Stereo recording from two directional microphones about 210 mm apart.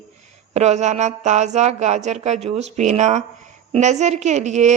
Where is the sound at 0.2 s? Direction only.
30° right (ahead or behind).